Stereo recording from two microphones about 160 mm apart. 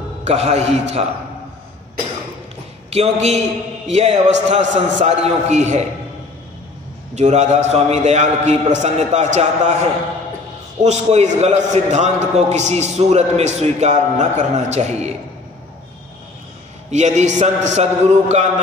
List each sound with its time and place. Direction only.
0.2 s a man's voice: 40° right (ahead or behind)
2.9 s a man's voice: 40° right (ahead or behind)
7.2 s a man's voice: 45° right (ahead or behind)
10.8 s a man's voice: 45° right (ahead or behind)
16.9 s a man's voice: 45° right (ahead or behind)